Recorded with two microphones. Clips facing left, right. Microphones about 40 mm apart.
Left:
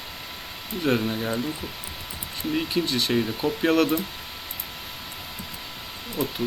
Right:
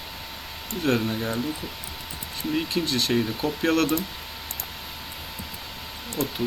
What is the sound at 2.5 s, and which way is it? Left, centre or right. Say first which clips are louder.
Speech: left 1 dB; centre.